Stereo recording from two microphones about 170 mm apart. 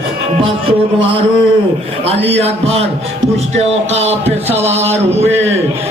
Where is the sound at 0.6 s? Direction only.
30° right (ahead or behind).